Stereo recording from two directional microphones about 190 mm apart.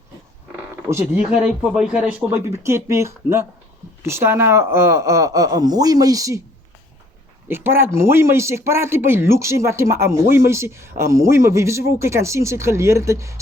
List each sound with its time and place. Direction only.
1.1 s a man's voice: 5° right (ahead or behind)
7.4 s a man's voice: 10° right (ahead or behind)